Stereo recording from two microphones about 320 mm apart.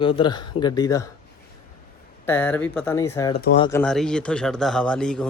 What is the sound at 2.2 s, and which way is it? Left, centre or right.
Speech, centre.